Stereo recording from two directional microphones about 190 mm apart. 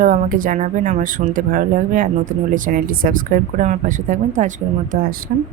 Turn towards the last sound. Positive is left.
turn(degrees=-50)  # may be behind; listen again after turning